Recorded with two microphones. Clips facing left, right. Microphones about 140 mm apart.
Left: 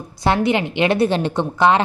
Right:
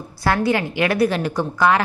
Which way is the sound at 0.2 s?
20° left (ahead or behind).